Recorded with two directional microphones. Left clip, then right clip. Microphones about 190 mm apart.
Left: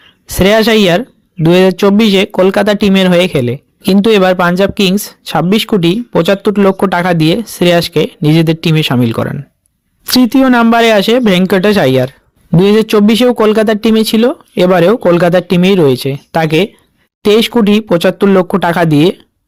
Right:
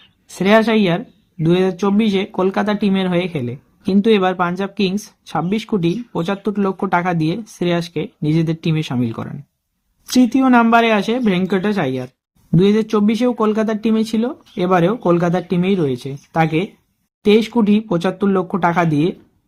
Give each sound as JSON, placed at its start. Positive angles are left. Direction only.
{"t": 0.3, "sound": "speech", "side_deg": 40}